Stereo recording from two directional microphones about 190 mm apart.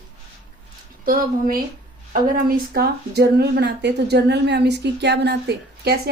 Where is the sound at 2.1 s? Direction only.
50° right (ahead or behind).